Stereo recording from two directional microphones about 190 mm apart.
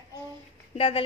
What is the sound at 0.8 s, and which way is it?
Speech, 30° left (ahead or behind).